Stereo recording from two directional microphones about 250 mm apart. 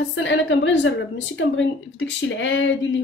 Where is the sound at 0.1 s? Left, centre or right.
Left.